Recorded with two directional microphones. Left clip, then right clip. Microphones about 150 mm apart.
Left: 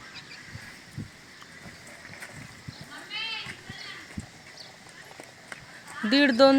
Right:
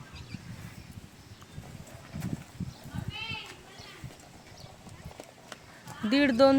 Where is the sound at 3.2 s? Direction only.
45° right (ahead or behind).